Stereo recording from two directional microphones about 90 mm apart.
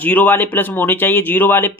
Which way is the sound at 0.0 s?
15° left (ahead or behind).